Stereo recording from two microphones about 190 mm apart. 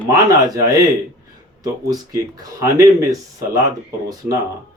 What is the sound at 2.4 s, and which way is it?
Speech, 15° right (ahead or behind).